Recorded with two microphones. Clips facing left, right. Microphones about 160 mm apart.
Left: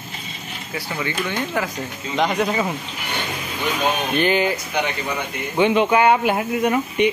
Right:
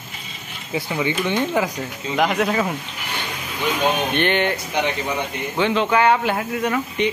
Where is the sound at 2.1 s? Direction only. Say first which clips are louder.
Right 1 dB; centre (ahead or behind).